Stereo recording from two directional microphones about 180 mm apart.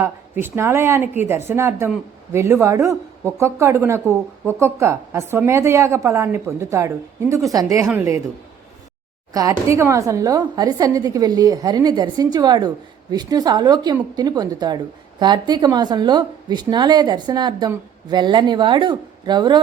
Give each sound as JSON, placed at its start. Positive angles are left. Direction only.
{"t": 0.0, "sound": "speech", "side_deg": -15}
{"t": 9.3, "sound": "a woman's voice", "side_deg": -20}